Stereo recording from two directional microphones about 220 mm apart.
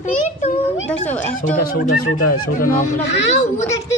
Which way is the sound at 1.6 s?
45° left (ahead or behind).